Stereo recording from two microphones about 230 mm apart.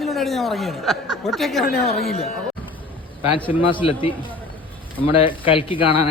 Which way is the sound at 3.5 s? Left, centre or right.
Left.